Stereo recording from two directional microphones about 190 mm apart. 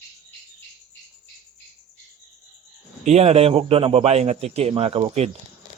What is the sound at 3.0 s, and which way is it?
A man's voice, 35° right (ahead or behind).